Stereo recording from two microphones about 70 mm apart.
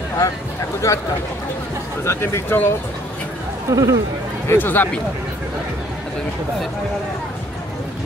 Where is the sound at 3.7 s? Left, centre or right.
Right.